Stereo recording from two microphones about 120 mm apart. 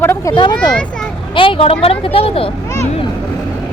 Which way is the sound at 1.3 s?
50° left (ahead or behind).